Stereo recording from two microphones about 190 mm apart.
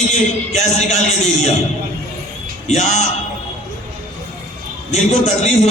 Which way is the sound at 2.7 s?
35° left (ahead or behind).